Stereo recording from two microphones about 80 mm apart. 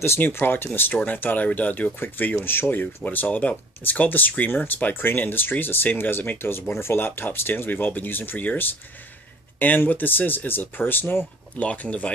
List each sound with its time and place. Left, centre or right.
0.0 s speech: left